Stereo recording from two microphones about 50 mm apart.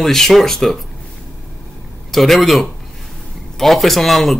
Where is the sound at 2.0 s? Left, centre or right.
Centre.